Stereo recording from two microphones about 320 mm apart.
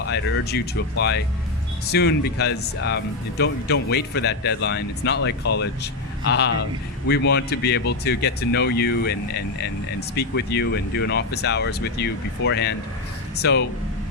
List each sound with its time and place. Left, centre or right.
0.1 s speech: left